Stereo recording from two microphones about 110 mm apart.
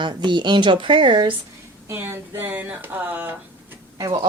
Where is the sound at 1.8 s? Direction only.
25° right (ahead or behind).